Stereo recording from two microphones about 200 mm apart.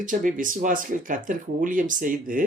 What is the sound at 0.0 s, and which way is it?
Speech, 40° right (ahead or behind).